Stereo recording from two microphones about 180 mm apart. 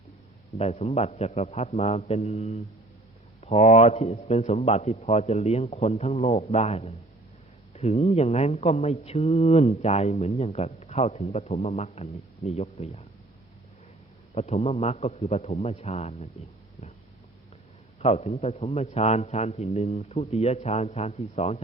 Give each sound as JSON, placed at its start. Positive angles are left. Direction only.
{"t": 0.6, "sound": "speech", "side_deg": 35}
{"t": 14.3, "sound": "speech", "side_deg": 35}
{"t": 18.0, "sound": "speech", "side_deg": 35}